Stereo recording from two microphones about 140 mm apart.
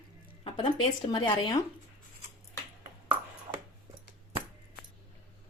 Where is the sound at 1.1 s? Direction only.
30° left (ahead or behind).